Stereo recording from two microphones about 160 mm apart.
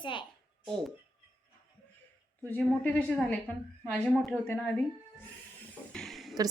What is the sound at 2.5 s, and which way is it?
Speech, 10° left (ahead or behind).